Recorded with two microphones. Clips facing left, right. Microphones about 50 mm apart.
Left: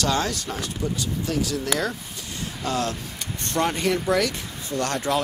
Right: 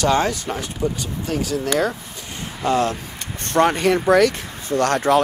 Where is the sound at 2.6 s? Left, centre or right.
Right.